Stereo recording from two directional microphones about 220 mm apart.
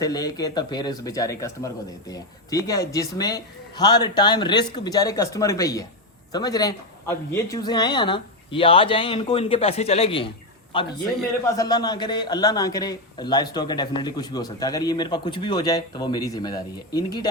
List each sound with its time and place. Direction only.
0.0 s a man's voice: 15° left (ahead or behind)